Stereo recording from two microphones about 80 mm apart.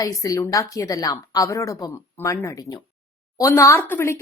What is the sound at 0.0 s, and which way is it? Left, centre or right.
A woman's voice, left.